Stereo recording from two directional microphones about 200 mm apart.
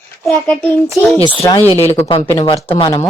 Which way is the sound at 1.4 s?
15° left (ahead or behind).